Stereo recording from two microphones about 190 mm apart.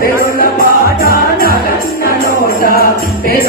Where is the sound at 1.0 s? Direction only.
50° left (ahead or behind).